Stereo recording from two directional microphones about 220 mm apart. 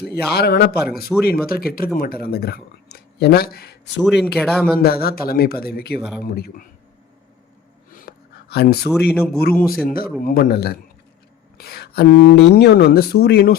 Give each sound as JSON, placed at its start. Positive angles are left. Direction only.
{"t": 0.1, "sound": "speech", "side_deg": 45}
{"t": 1.1, "sound": "speech", "side_deg": 0}
{"t": 1.5, "sound": "speech", "side_deg": 40}
{"t": 4.0, "sound": "speech", "side_deg": 0}
{"t": 4.8, "sound": "speech", "side_deg": 45}
{"t": 6.0, "sound": "speech", "side_deg": -5}
{"t": 6.2, "sound": "speech", "side_deg": 45}
{"t": 7.9, "sound": "a sound", "side_deg": 45}
{"t": 8.9, "sound": "speech", "side_deg": 5}
{"t": 9.4, "sound": "speech", "side_deg": 40}